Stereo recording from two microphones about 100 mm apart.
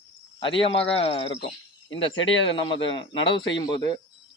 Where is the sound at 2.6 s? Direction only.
50° left (ahead or behind).